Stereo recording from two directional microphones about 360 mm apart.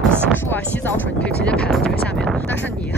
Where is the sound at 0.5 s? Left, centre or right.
Centre.